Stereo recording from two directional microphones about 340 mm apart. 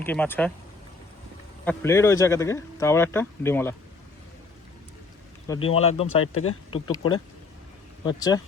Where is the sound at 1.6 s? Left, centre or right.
Centre.